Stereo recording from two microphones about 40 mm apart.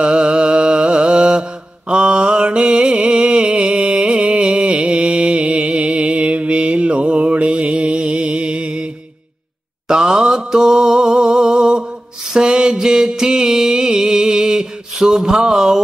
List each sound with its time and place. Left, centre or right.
0.0 s mantra: right
9.8 s mantra: centre
12.3 s music: right